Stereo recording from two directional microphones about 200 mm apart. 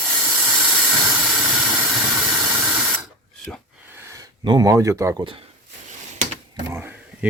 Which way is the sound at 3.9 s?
15° right (ahead or behind).